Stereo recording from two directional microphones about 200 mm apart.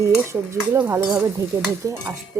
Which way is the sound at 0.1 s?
10° right (ahead or behind).